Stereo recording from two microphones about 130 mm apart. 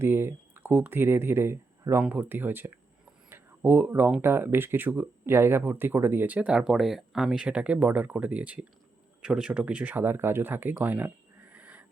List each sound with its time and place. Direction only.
0.0 s speech: 20° right (ahead or behind)